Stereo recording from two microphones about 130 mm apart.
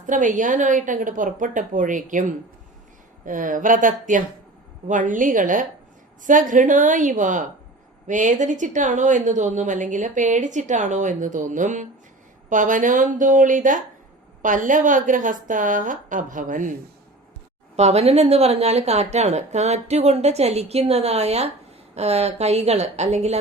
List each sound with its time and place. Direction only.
0.0 s a woman's voice: 75° right (ahead or behind)
3.2 s a woman's voice: 90° right
17.7 s a woman's voice: 55° right (ahead or behind)